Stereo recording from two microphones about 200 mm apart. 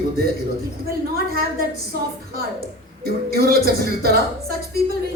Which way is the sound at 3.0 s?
50° right (ahead or behind).